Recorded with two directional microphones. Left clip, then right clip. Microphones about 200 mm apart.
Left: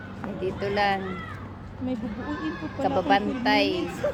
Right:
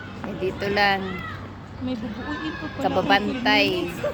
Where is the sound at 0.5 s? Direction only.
20° right (ahead or behind).